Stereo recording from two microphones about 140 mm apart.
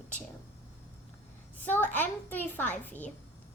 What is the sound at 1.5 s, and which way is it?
A woman's voice, 10° left (ahead or behind).